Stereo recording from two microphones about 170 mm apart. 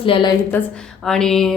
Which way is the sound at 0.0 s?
30° left (ahead or behind).